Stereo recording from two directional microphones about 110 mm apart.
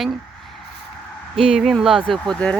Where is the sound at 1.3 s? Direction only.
5° right (ahead or behind).